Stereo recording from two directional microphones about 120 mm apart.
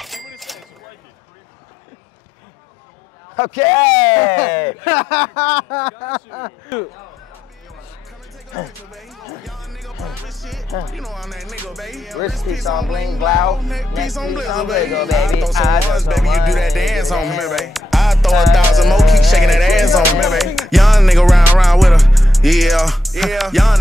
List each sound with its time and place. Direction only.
0.0 s a sound: centre (ahead or behind)
3.3 s speech: 20° left (ahead or behind)
8.9 s speech: centre (ahead or behind)